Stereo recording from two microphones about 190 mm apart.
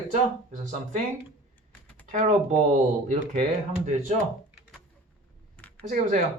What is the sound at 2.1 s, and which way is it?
Speech, 35° right (ahead or behind).